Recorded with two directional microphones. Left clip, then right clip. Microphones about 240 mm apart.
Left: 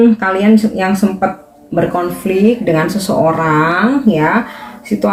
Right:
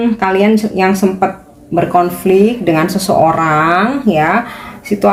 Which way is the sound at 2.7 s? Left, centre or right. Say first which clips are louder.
Right 1 dB; right.